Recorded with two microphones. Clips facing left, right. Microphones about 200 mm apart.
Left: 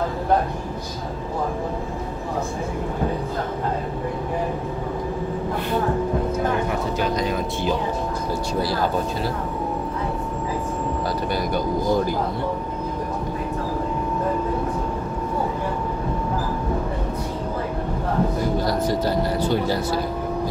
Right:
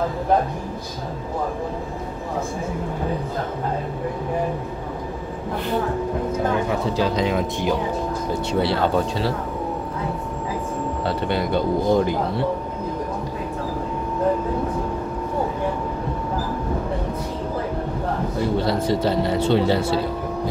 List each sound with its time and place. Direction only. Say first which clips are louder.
8.3 s speech: right 3 dB; 25° right (ahead or behind)
11.2 s speech: right 4 dB; 25° right (ahead or behind)
18.6 s speech: right 1 dB; 25° right (ahead or behind)